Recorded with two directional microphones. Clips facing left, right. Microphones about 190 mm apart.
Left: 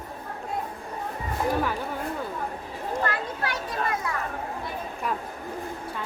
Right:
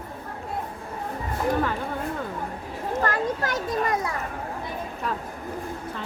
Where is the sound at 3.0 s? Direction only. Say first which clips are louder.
Right 5 dB; 45° right (ahead or behind).